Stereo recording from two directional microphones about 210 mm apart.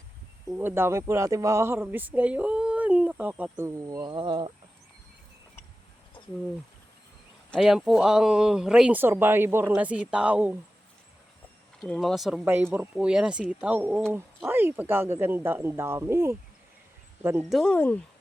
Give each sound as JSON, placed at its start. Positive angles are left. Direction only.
{"t": 0.5, "sound": "speech", "side_deg": -10}
{"t": 7.5, "sound": "speech", "side_deg": 0}
{"t": 11.8, "sound": "speech", "side_deg": 0}
{"t": 17.5, "sound": "speech", "side_deg": 5}